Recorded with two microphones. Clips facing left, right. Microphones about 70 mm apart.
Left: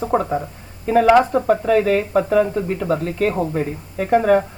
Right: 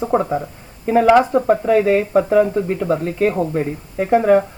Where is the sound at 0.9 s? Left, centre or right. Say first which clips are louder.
Right 1 dB; centre.